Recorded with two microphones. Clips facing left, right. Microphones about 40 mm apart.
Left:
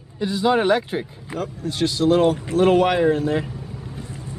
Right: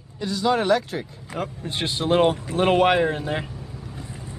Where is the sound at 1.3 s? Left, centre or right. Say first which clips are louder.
Left 3 dB; right.